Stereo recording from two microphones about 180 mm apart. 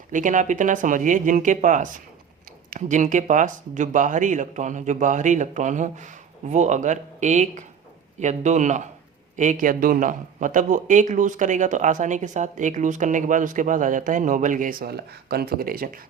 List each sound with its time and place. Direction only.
0.1 s a man's voice: 45° right (ahead or behind)